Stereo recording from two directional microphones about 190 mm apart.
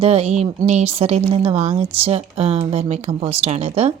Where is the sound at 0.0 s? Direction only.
30° right (ahead or behind).